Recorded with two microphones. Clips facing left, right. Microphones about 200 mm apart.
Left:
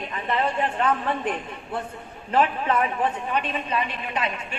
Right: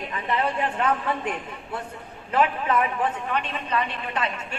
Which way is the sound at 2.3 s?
30° left (ahead or behind).